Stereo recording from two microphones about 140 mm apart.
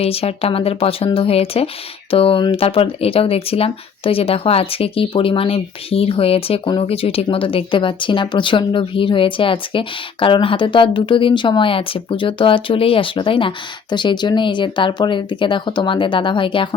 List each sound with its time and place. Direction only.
0.0 s speech: 45° left (ahead or behind)